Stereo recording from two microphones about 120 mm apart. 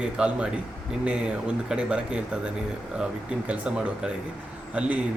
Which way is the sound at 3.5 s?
10° right (ahead or behind).